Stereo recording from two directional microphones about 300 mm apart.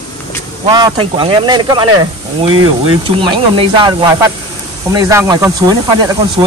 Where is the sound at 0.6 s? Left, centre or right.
Centre.